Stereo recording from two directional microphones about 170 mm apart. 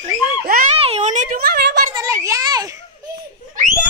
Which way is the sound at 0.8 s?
40° right (ahead or behind).